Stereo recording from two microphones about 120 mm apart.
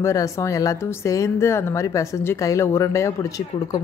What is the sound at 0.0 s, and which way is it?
A woman's voice, 25° left (ahead or behind).